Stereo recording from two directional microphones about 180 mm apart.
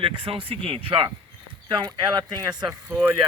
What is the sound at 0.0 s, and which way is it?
Speech, 30° right (ahead or behind).